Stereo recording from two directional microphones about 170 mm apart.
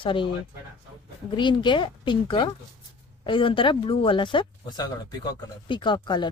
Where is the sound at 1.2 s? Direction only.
25° left (ahead or behind).